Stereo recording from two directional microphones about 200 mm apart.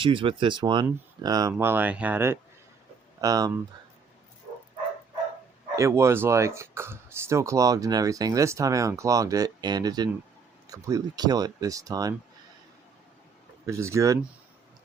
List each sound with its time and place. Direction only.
0.0 s speech: 25° right (ahead or behind)
5.7 s speech: 15° right (ahead or behind)
13.7 s speech: 15° right (ahead or behind)